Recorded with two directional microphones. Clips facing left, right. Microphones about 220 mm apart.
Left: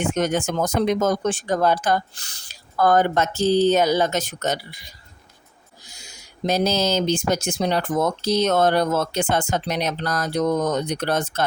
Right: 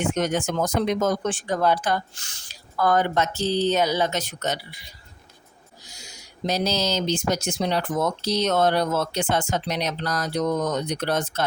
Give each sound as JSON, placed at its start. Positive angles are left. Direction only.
{"t": 0.0, "sound": "speech", "side_deg": 50}